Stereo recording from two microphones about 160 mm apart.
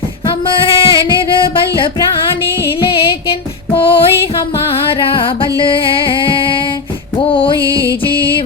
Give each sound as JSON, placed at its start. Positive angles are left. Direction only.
{"t": 0.4, "sound": "music", "side_deg": 30}